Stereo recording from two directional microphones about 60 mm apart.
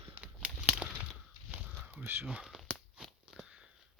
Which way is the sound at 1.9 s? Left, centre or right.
Right.